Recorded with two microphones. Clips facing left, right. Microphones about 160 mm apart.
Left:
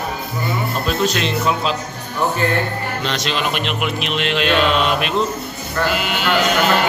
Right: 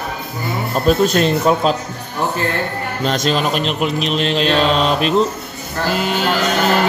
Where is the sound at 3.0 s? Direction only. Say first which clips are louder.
Right 6 dB; 45° right (ahead or behind).